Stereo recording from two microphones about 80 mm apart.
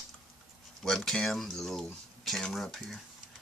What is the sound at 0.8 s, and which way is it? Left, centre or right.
Speech, centre.